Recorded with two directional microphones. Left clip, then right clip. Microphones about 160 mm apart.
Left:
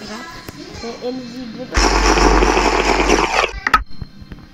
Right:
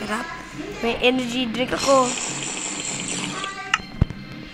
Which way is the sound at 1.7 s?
5° right (ahead or behind).